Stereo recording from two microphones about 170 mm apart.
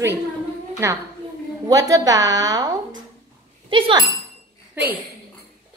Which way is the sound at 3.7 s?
25° right (ahead or behind).